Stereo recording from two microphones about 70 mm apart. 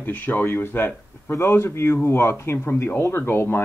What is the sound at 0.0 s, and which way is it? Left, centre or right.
Speech, left.